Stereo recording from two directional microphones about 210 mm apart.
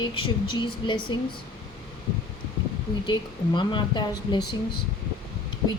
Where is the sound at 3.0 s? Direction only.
20° left (ahead or behind).